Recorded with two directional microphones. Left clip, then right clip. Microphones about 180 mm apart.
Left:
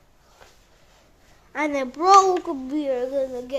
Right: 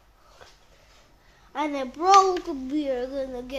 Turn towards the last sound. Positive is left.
turn(degrees=0)  # may be behind; listen again after turning